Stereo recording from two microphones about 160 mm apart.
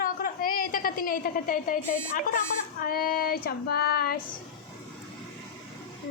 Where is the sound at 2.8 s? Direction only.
60° left (ahead or behind).